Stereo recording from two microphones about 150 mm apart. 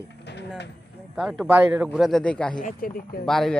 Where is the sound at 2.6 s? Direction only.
65° left (ahead or behind); by 3.3 s 80° left.